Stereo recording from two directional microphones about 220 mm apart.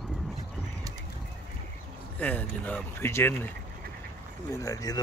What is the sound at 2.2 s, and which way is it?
Speech, 10° left (ahead or behind).